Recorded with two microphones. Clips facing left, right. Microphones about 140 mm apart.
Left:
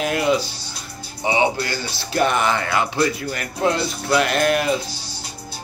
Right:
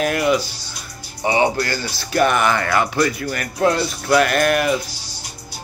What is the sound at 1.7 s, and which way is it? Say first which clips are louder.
Speech: right 2 dB; 25° left (ahead or behind).